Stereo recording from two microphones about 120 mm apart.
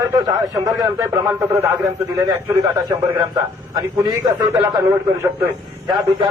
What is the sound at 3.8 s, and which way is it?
A man's voice, 30° right (ahead or behind).